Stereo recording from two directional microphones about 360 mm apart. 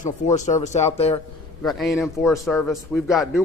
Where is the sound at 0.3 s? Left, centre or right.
Centre.